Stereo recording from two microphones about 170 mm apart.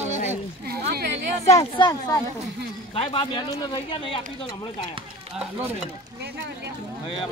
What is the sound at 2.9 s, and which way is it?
A man's voice, 35° left (ahead or behind).